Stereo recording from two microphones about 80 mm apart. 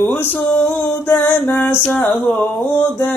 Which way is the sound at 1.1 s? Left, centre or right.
Left.